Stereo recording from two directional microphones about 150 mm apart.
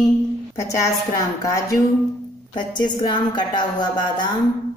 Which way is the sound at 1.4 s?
20° left (ahead or behind).